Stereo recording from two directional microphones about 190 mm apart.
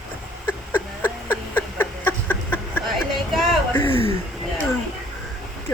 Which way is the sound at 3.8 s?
30° left (ahead or behind).